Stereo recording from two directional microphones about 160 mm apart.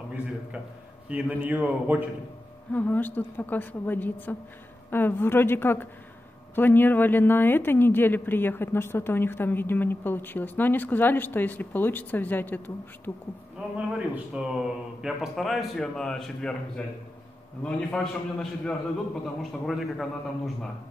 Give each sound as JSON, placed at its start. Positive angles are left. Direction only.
{"t": 1.0, "sound": "a man's voice", "side_deg": -10}
{"t": 2.7, "sound": "a woman's voice", "side_deg": 10}
{"t": 13.7, "sound": "a man's voice", "side_deg": -5}